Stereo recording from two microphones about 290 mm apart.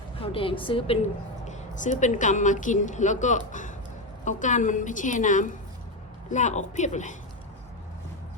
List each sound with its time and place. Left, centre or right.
0.2 s a woman's voice: centre